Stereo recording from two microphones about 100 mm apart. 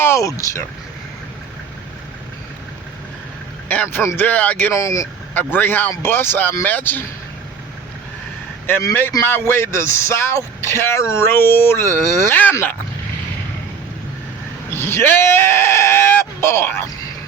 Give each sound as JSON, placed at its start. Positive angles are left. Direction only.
{"t": 0.0, "sound": "speech", "side_deg": 30}
{"t": 3.7, "sound": "a man's voice", "side_deg": 15}
{"t": 4.7, "sound": "speech", "side_deg": 30}
{"t": 5.3, "sound": "speech", "side_deg": 20}
{"t": 8.8, "sound": "a man's voice", "side_deg": 25}
{"t": 14.7, "sound": "speech", "side_deg": 25}